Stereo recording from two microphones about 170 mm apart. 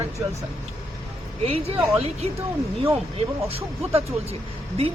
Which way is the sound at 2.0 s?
35° right (ahead or behind).